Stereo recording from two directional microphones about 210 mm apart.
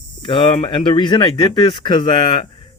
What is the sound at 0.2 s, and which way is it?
Speech, 25° left (ahead or behind).